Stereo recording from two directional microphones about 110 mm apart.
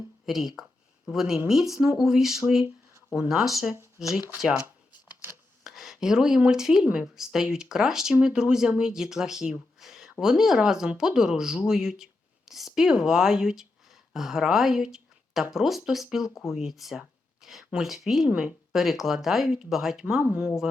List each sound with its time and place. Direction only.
0.3 s speech: centre (ahead or behind)
4.6 s shuffling cards: 20° right (ahead or behind)
5.6 s speech: 5° right (ahead or behind)
18.3 s speech: 15° right (ahead or behind)
18.7 s speech: centre (ahead or behind)